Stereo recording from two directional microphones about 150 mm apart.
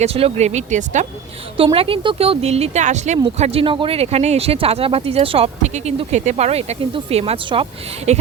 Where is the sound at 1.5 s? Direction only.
40° right (ahead or behind).